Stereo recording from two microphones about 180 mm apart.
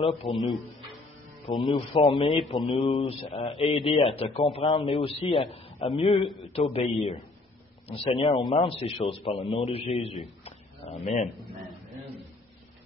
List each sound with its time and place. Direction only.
0.0 s a man's voice: 30° left (ahead or behind)
1.7 s a man's voice: 25° left (ahead or behind)
10.4 s a sound: 35° left (ahead or behind)